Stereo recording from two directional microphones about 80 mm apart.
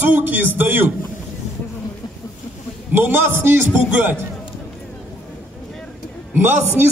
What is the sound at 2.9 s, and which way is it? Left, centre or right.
Speech, right.